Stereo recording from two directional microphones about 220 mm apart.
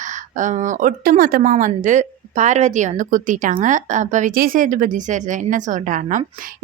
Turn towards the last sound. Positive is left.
turn(degrees=-35)  # may be behind; listen again after turning